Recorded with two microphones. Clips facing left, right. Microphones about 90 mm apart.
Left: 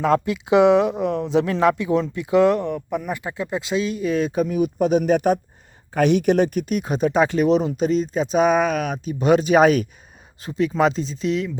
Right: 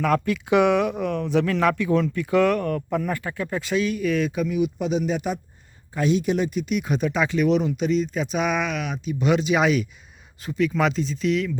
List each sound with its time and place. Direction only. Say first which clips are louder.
0.0 s speech: left 3 dB; 25° left (ahead or behind)
2.7 s speech: right 1 dB; 15° left (ahead or behind); by 5.4 s 55° left (ahead or behind)
5.9 s speech: left 5 dB; 65° left (ahead or behind); by 9.8 s 45° left (ahead or behind)
10.4 s speech: left 3 dB; 30° left (ahead or behind)